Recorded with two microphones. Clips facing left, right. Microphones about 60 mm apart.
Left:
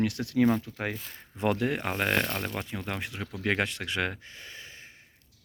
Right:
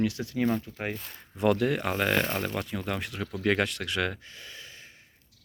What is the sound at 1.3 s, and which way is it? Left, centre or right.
Speech, left.